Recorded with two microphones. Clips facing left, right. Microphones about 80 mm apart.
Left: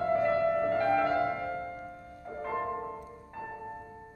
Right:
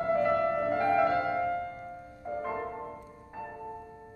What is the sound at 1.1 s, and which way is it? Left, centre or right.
Music, centre.